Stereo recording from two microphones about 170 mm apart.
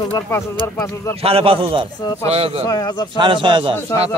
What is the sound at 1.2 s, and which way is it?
Speech, 35° right (ahead or behind).